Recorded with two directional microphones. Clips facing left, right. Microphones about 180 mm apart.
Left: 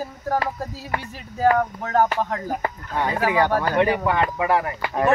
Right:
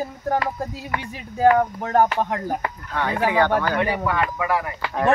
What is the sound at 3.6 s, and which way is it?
Speech, 30° left (ahead or behind).